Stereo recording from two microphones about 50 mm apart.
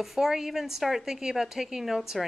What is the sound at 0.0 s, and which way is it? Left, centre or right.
A woman's voice, centre.